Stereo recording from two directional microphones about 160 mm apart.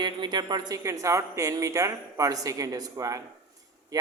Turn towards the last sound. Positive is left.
turn(degrees=-20)  # may be behind; listen again after turning